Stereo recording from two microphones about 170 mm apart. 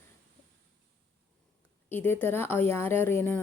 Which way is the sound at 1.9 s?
10° left (ahead or behind).